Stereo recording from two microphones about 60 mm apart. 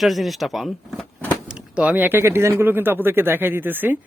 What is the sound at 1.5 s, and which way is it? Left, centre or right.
Speech, right.